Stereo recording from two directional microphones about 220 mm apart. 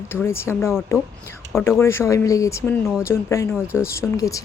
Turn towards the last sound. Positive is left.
turn(degrees=15)  # may be behind; listen again after turning